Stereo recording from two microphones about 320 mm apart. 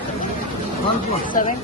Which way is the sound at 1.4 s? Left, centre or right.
Left.